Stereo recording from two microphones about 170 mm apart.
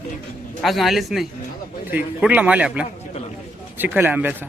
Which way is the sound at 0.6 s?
Centre (ahead or behind).